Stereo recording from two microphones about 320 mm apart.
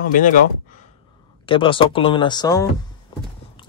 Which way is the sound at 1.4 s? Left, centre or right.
Centre.